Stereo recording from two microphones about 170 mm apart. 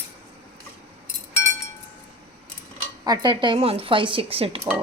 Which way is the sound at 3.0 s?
25° right (ahead or behind).